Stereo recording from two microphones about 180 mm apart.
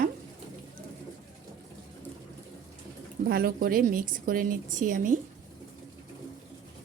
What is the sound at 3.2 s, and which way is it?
A woman's voice, 55° right (ahead or behind).